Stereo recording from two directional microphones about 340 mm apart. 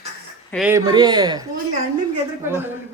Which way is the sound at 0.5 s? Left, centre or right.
Centre.